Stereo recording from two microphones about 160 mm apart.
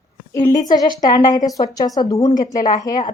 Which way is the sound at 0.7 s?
25° left (ahead or behind).